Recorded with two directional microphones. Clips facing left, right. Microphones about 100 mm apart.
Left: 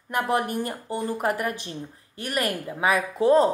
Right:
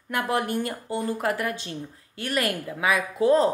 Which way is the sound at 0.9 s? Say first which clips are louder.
Even; 20° left (ahead or behind).